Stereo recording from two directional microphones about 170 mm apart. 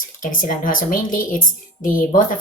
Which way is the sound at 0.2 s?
50° left (ahead or behind).